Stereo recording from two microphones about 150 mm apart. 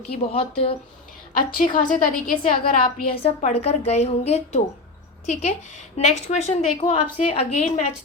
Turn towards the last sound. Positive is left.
turn(degrees=45)  # may be behind; listen again after turning